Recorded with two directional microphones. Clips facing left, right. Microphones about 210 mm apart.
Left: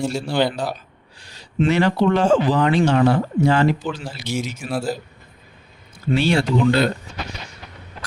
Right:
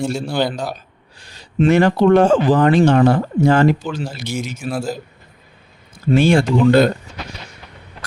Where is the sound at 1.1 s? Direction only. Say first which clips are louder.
Right 3 dB; 50° right (ahead or behind).